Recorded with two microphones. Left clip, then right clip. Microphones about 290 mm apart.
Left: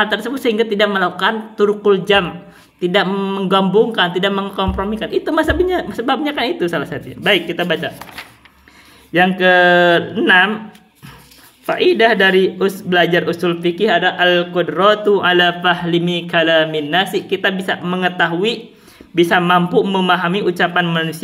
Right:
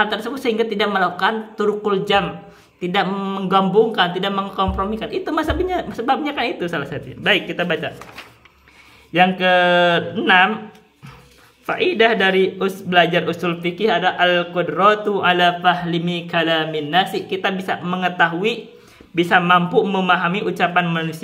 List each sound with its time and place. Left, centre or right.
0.0 s speech: centre
9.1 s speech: centre
11.6 s speech: centre